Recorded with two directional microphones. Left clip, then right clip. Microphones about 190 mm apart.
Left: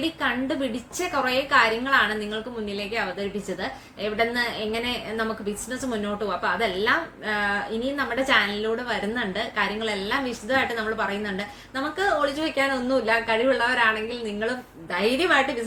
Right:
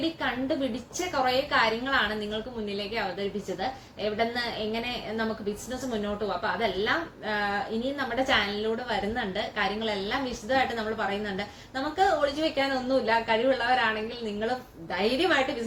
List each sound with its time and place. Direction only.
0.2 s a woman's voice: 25° left (ahead or behind)
14.9 s a woman's voice: 25° left (ahead or behind)